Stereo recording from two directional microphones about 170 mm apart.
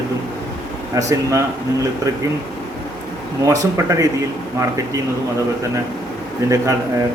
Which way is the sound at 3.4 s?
20° right (ahead or behind).